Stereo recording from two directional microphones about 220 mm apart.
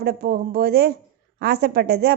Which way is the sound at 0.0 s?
45° right (ahead or behind).